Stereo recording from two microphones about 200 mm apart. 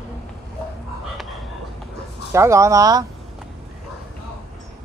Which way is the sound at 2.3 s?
15° right (ahead or behind).